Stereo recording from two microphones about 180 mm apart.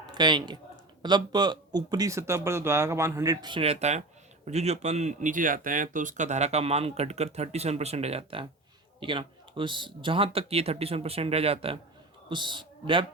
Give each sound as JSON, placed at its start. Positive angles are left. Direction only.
{"t": 0.0, "sound": "a man's voice", "side_deg": -25}